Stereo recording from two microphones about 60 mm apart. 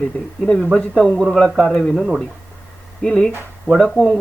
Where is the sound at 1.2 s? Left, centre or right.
Centre.